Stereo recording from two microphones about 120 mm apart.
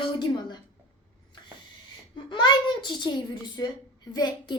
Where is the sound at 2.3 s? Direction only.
40° left (ahead or behind).